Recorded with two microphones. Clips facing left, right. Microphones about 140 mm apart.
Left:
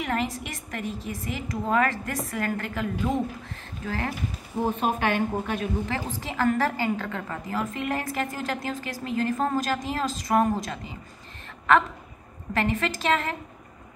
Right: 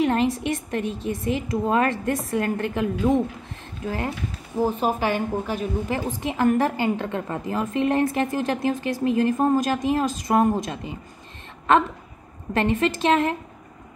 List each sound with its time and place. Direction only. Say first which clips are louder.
0.0 s a woman's voice: right 7 dB; 25° right (ahead or behind)
4.6 s a woman's voice: right 2 dB; 5° right (ahead or behind)
5.9 s a woman's voice: right 4 dB; 20° right (ahead or behind)
12.5 s a woman's voice: right 5 dB; 20° right (ahead or behind)